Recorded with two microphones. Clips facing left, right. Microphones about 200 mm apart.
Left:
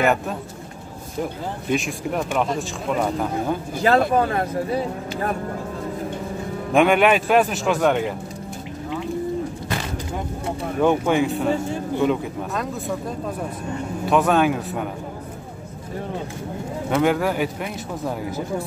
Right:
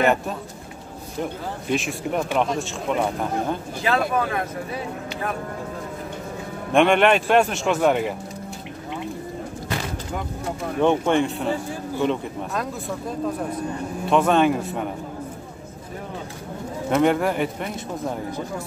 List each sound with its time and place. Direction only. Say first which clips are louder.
1.7 s speech: left 1 dB; centre (ahead or behind)
3.8 s speech: left 5 dB; 40° left (ahead or behind)
6.7 s speech: even; 5° left (ahead or behind)
10.8 s speech: even; 5° left (ahead or behind)
14.0 s speech: even; 5° left (ahead or behind)
16.9 s speech: even; centre (ahead or behind)